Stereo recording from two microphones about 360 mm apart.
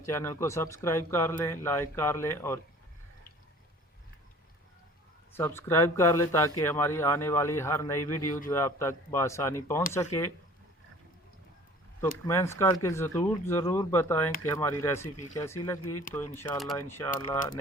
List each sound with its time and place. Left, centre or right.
0.0 s speech: centre
5.3 s speech: centre
12.3 s speech: centre
15.8 s speech: left
16.3 s speech: centre